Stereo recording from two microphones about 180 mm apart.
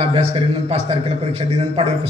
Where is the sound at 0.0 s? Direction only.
35° right (ahead or behind).